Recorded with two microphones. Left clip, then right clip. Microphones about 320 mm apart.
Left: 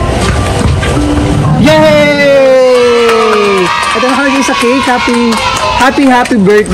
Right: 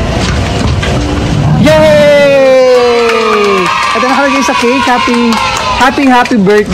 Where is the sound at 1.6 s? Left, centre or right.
Right.